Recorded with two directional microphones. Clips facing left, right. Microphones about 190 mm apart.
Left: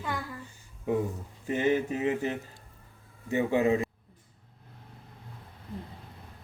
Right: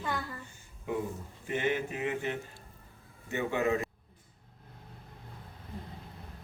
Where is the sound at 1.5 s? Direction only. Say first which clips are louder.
Left 5 dB; 35° left (ahead or behind).